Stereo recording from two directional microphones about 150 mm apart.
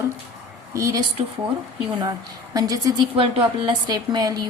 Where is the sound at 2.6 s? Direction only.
25° right (ahead or behind).